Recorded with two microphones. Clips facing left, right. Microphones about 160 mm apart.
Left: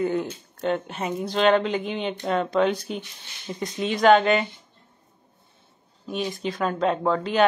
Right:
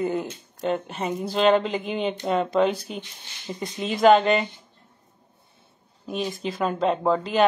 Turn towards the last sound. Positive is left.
turn(degrees=-5)  # may be behind; listen again after turning